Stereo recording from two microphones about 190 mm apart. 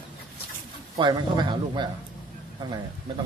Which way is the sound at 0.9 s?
25° right (ahead or behind).